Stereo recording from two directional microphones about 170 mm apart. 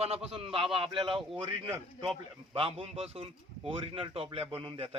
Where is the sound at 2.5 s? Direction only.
30° right (ahead or behind).